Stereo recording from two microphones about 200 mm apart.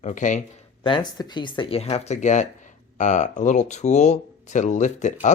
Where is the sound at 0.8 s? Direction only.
25° left (ahead or behind).